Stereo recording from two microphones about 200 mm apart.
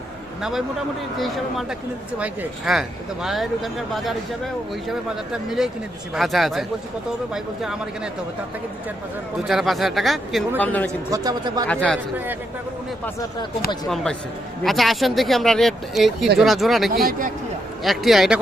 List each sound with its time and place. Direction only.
1.1 s speech: centre (ahead or behind)
5.5 s speech: centre (ahead or behind)
9.5 s speech: centre (ahead or behind)
11.1 s speech: 20° right (ahead or behind)
11.7 s speech: 5° left (ahead or behind)
13.8 s speech: centre (ahead or behind)
16.9 s speech: 45° right (ahead or behind)
17.8 s speech: centre (ahead or behind)